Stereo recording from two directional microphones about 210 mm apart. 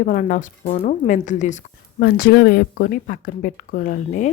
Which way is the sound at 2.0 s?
50° left (ahead or behind).